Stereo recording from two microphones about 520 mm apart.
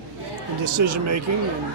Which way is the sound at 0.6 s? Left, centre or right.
Right.